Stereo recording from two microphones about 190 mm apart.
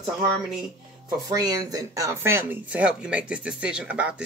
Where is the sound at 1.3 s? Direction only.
20° right (ahead or behind).